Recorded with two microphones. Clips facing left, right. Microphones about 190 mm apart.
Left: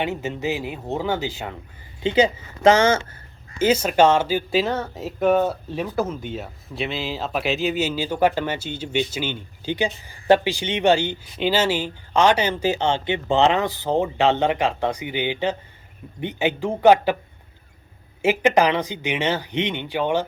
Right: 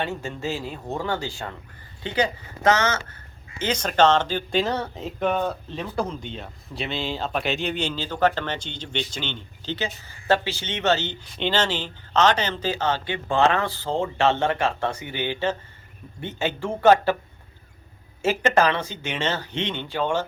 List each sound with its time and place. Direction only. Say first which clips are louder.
0.0 s speech: left 3 dB; 20° left (ahead or behind)
3.6 s speech: left 4 dB; 10° left (ahead or behind)
12.8 s speech: left 3 dB; 25° left (ahead or behind)
18.2 s speech: left 3 dB; 15° left (ahead or behind)